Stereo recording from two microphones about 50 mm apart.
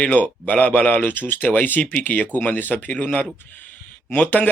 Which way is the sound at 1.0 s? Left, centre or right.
Left.